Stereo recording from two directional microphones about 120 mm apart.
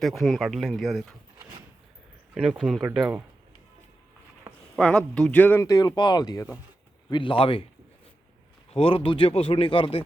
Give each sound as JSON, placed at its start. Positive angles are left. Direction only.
{"t": 0.0, "sound": "speech", "side_deg": 0}
{"t": 2.3, "sound": "speech", "side_deg": -5}
{"t": 4.5, "sound": "a sound", "side_deg": -20}
{"t": 4.8, "sound": "speech", "side_deg": 10}
{"t": 5.6, "sound": "speech", "side_deg": 30}
{"t": 7.1, "sound": "speech", "side_deg": 45}
{"t": 8.7, "sound": "speech", "side_deg": 50}